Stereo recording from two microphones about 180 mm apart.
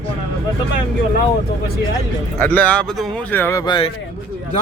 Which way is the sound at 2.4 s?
10° left (ahead or behind).